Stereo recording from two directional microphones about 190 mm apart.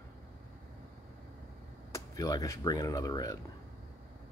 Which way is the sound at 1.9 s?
20° left (ahead or behind).